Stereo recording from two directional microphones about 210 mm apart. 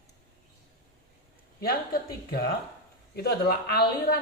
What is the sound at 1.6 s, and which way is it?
A man's voice, 45° left (ahead or behind).